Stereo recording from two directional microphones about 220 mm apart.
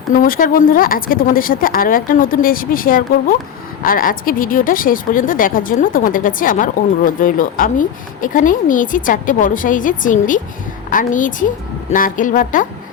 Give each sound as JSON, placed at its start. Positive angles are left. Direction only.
{"t": 0.1, "sound": "speech", "side_deg": 40}